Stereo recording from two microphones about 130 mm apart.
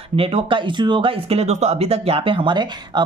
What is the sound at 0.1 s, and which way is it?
Speech, 50° right (ahead or behind).